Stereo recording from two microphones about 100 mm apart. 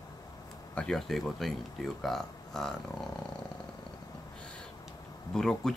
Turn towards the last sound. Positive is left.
turn(degrees=5)  # may be behind; listen again after turning